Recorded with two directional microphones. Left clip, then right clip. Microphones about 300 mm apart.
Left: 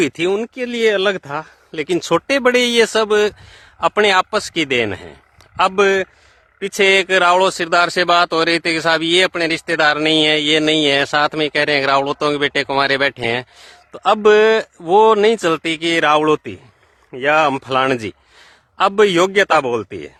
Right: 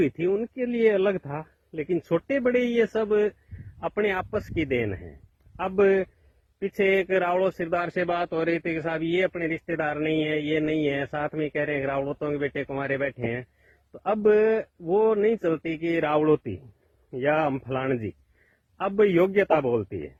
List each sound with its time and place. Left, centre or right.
0.0 s speech: centre